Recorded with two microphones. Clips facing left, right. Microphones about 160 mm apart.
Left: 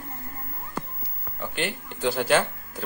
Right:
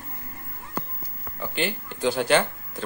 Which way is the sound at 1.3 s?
Centre (ahead or behind).